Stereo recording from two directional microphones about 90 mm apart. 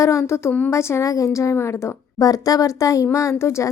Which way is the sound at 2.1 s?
45° left (ahead or behind).